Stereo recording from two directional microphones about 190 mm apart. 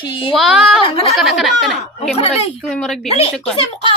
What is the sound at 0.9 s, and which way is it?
Speech, 30° left (ahead or behind).